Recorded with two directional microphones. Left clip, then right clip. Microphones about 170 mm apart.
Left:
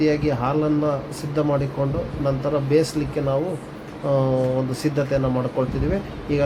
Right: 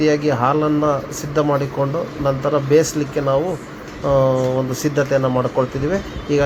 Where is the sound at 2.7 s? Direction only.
20° right (ahead or behind).